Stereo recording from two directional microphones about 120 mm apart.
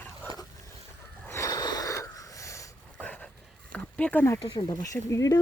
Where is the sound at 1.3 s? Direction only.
30° left (ahead or behind).